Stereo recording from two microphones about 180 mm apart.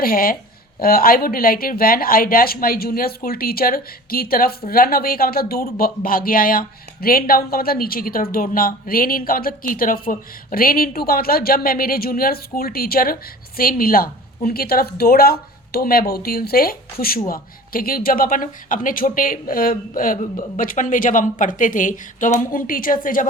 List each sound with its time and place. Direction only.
0.0 s speech: 55° left (ahead or behind)